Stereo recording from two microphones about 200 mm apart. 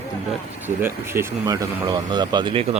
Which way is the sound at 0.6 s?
10° right (ahead or behind).